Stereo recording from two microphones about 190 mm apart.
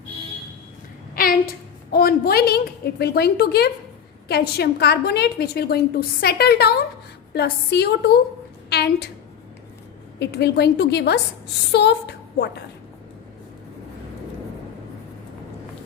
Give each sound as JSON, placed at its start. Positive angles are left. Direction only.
{"t": 1.1, "sound": "a sound", "side_deg": 50}
{"t": 1.9, "sound": "a woman's voice", "side_deg": 50}
{"t": 10.2, "sound": "a woman's voice", "side_deg": 60}